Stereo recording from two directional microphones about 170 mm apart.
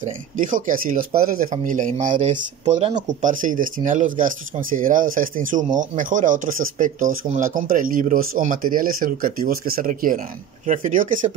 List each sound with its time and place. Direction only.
0.0 s speech: 50° right (ahead or behind)